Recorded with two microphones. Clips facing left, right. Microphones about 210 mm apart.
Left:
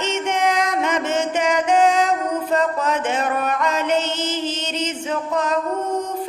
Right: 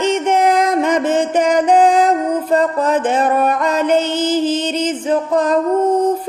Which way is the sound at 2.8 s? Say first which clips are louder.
Right 6 dB; 35° right (ahead or behind).